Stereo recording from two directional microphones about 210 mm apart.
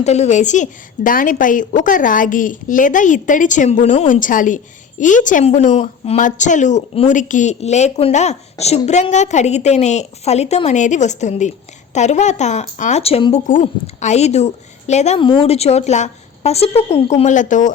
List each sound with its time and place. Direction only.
0.0 s a woman's voice: 30° left (ahead or behind)